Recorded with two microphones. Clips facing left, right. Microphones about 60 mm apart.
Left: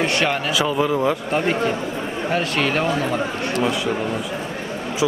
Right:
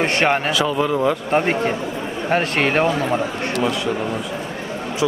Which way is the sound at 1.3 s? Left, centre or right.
Right.